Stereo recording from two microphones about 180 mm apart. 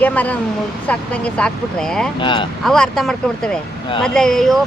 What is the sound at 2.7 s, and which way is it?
Speech, 5° left (ahead or behind).